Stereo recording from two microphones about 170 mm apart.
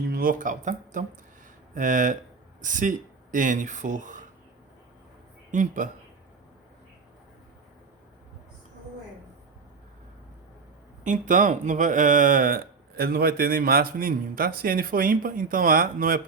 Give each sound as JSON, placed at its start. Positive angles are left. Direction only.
{"t": 0.1, "sound": "speech", "side_deg": -55}
{"t": 5.5, "sound": "speech", "side_deg": -50}
{"t": 11.0, "sound": "speech", "side_deg": -50}